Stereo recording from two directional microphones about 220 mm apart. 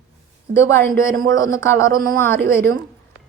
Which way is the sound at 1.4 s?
15° left (ahead or behind).